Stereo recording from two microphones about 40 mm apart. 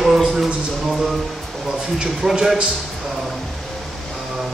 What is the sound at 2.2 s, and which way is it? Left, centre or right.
Speech, centre.